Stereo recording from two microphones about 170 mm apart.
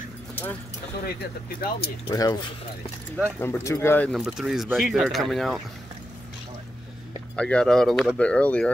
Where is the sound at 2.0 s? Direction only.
25° left (ahead or behind).